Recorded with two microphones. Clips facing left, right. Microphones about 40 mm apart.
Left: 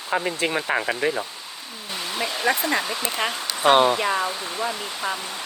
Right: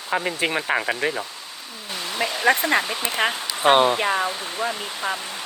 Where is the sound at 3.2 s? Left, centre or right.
Right.